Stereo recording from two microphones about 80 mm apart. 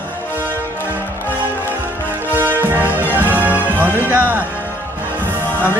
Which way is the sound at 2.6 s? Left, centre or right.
Right.